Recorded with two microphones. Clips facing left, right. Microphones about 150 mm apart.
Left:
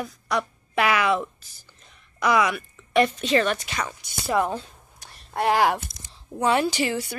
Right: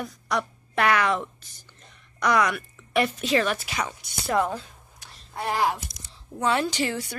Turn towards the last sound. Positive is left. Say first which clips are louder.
# left 2 dB
turn(degrees=5)  # may be behind; listen again after turning